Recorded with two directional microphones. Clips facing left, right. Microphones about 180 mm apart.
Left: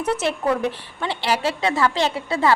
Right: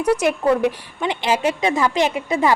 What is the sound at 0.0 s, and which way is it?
A woman's voice, 15° right (ahead or behind).